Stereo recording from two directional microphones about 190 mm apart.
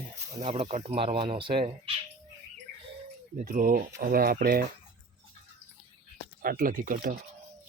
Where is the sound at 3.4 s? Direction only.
45° right (ahead or behind).